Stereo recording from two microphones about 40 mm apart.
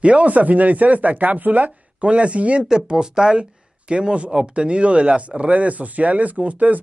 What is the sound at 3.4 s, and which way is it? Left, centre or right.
Speech, right.